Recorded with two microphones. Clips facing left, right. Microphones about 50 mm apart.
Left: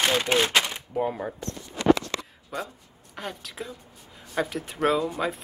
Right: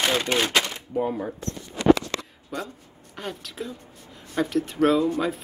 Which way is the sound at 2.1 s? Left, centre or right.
Centre.